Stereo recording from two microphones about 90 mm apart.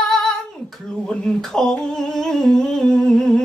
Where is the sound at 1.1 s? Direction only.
5° left (ahead or behind).